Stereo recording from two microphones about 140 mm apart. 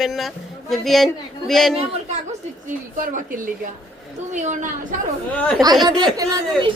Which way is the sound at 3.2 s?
75° right (ahead or behind).